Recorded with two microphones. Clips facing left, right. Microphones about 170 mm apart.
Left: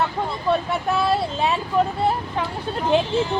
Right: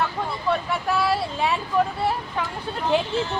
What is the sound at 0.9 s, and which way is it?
Speech, 20° left (ahead or behind).